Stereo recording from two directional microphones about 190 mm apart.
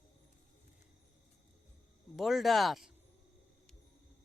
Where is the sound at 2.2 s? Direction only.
Centre (ahead or behind).